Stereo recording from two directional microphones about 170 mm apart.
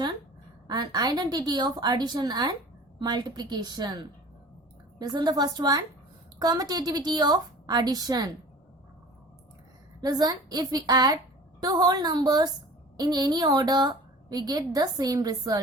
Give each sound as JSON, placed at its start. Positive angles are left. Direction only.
{"t": 0.7, "sound": "a woman's voice", "side_deg": -25}
{"t": 10.0, "sound": "a woman's voice", "side_deg": -25}